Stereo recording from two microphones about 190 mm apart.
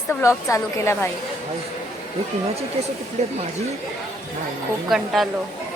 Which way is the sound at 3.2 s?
35° right (ahead or behind).